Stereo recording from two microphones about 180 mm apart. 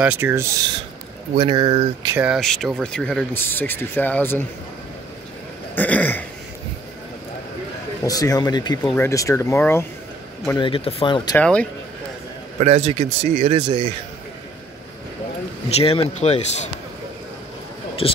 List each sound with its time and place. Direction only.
0.0 s speech: 10° right (ahead or behind)
1.4 s speech: 25° right (ahead or behind)
2.1 s speech: 5° right (ahead or behind); by 4.5 s 10° left (ahead or behind)
5.8 s speech: 10° left (ahead or behind)
8.0 s speech: 20° left (ahead or behind)
8.8 s speech: 10° left (ahead or behind)
10.6 s speech: 30° left (ahead or behind)
11.3 s speech: 5° left (ahead or behind)
12.5 s speech: 35° right (ahead or behind)
13.6 s speech: 25° right (ahead or behind)
15.7 s speech: 30° left (ahead or behind)
18.0 s speech: 30° left (ahead or behind)